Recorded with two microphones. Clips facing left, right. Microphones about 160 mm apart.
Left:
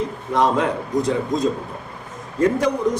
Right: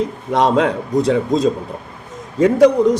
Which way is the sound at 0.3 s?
75° right (ahead or behind).